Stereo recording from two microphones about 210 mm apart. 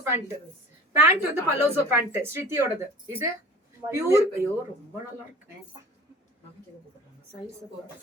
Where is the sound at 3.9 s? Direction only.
15° right (ahead or behind).